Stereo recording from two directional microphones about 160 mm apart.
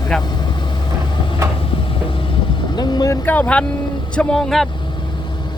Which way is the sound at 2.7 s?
25° left (ahead or behind).